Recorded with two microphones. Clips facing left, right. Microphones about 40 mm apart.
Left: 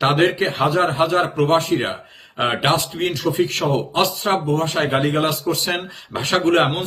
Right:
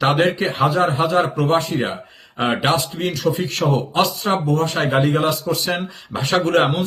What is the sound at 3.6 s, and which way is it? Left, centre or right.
A man's voice, left.